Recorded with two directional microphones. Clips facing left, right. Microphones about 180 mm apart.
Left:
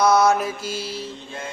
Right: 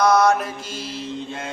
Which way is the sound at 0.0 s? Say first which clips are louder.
Even; 5° left (ahead or behind).